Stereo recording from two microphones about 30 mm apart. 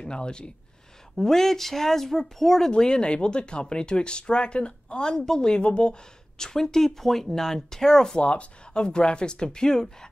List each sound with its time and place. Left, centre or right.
0.0 s speech: left
1.1 s speech: centre
2.8 s speech: left
5.0 s speech: centre
5.6 s speech: left
6.3 s speech: left
8.2 s speech: left
8.7 s speech: left